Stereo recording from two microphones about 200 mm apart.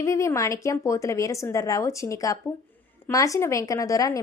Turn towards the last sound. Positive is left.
turn(degrees=15)  # may be behind; listen again after turning